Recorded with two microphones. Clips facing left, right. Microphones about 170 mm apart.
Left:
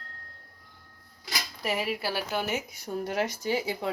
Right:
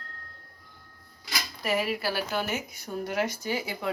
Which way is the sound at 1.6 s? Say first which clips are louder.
Right 2 dB; 25° left (ahead or behind).